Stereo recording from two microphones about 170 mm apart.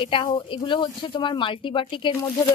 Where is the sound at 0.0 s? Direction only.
30° left (ahead or behind).